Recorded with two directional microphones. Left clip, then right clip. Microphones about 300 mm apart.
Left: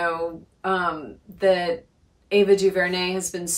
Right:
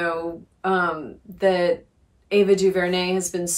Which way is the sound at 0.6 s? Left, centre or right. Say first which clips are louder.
Right 2 dB; centre.